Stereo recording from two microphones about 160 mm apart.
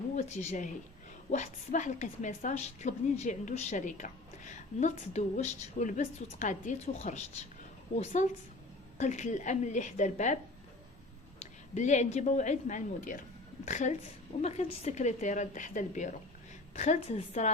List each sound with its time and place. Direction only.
0.2 s a woman's voice: 45° left (ahead or behind)
11.7 s a woman's voice: 45° left (ahead or behind)